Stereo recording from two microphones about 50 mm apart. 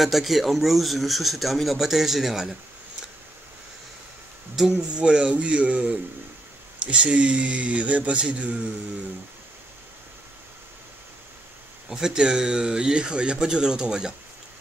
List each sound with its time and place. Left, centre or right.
0.0 s speech: centre
4.6 s speech: centre
11.9 s speech: centre